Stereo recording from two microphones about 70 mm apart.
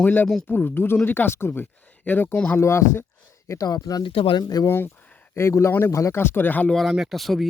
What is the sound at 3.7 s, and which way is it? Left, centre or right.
Speech, left.